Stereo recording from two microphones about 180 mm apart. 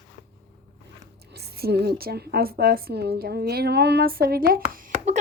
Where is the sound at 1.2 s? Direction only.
65° right (ahead or behind).